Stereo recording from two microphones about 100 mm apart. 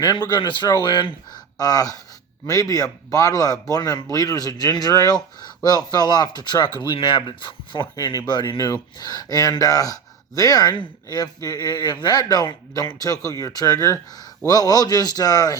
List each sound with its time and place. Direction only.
0.0 s a man's voice: 45° left (ahead or behind)